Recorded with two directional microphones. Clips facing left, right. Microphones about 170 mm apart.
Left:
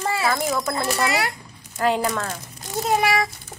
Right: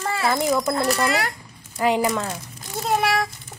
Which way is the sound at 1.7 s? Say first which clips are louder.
Right 1 dB; 15° right (ahead or behind).